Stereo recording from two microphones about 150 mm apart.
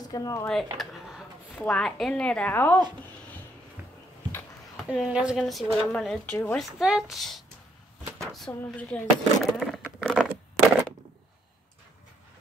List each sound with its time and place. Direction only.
0.0 s speech: 25° left (ahead or behind)
0.7 s a sound: centre (ahead or behind)
1.6 s a woman's voice: 5° left (ahead or behind)
4.8 s a woman's voice: 5° right (ahead or behind)
6.6 s a woman's voice: 5° right (ahead or behind)
8.3 s a sound: 5° left (ahead or behind)